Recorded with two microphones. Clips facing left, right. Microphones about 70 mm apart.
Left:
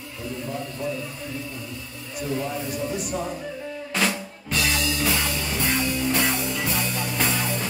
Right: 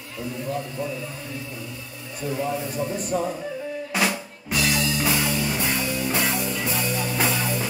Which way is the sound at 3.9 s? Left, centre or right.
Centre.